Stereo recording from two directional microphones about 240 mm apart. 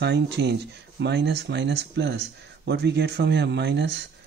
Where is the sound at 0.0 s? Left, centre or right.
Right.